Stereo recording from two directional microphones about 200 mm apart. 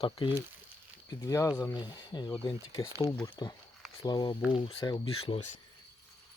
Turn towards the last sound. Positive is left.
turn(degrees=25)  # may be behind; listen again after turning